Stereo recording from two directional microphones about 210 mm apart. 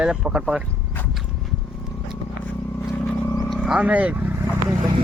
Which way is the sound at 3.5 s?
Centre (ahead or behind).